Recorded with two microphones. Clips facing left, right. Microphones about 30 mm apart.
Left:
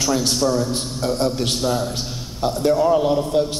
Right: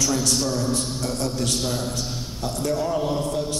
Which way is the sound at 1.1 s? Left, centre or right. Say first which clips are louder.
Left 5 dB; left.